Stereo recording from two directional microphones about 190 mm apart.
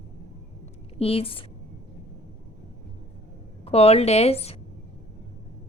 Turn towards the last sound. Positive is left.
turn(degrees=35)  # may be behind; listen again after turning